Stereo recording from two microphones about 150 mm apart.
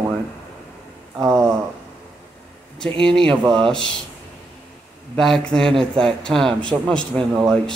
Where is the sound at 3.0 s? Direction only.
5° left (ahead or behind).